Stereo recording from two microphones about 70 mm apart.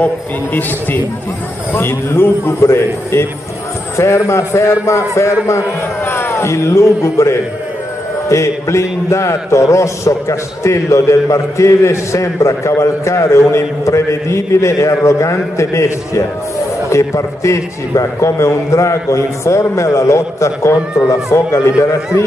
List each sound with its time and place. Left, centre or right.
0.0 s a man's voice: left
1.7 s a man's voice: left